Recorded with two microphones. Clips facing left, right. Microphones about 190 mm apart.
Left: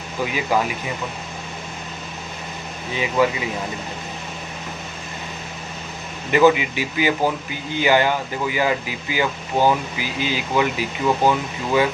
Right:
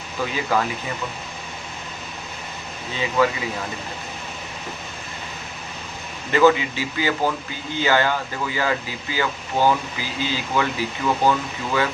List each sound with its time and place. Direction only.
0.5 s speech: 15° left (ahead or behind)
2.9 s speech: 15° left (ahead or behind)
6.3 s speech: 15° left (ahead or behind)